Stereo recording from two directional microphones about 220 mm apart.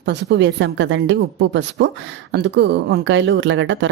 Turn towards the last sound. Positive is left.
turn(degrees=-55)  # may be behind; listen again after turning